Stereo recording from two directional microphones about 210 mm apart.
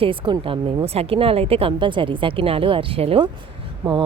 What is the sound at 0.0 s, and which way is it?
A woman's voice, 25° right (ahead or behind).